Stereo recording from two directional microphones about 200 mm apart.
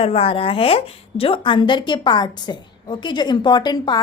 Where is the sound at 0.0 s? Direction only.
30° left (ahead or behind).